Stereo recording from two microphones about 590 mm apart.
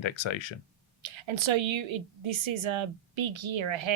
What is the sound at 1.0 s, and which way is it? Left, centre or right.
A woman's voice, right.